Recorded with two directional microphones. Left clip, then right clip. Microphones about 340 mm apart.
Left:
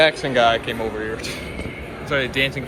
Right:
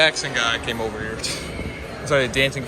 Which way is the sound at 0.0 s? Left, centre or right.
Centre.